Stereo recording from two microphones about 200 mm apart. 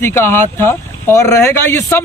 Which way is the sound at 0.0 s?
10° left (ahead or behind).